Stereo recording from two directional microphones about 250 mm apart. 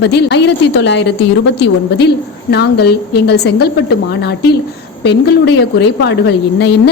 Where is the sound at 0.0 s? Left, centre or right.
Left.